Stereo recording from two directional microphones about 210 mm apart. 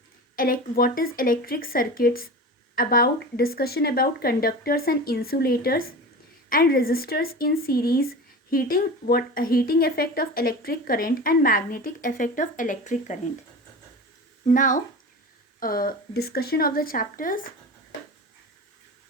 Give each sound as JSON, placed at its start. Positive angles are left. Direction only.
{"t": 0.3, "sound": "speech", "side_deg": 40}
{"t": 14.4, "sound": "speech", "side_deg": 40}